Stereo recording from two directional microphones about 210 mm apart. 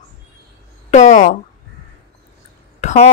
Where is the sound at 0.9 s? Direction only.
35° left (ahead or behind).